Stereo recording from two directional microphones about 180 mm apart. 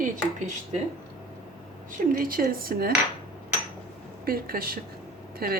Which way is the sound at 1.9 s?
50° right (ahead or behind).